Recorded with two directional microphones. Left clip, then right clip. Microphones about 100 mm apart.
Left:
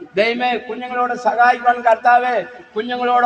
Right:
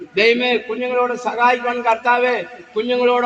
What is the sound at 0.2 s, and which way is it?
A man's voice, 45° left (ahead or behind).